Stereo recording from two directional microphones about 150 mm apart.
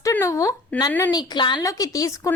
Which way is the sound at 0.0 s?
20° left (ahead or behind).